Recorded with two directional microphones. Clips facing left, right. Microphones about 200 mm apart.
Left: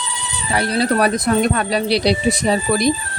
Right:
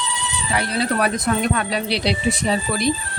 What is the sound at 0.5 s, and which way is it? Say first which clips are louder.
Speech: left 4 dB; 35° left (ahead or behind).